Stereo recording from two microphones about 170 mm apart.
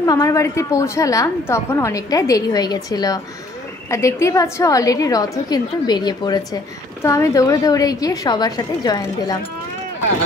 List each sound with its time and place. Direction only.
0.0 s a woman's voice: 20° left (ahead or behind)